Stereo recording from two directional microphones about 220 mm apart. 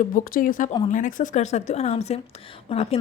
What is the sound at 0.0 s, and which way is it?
A woman's voice, 40° left (ahead or behind).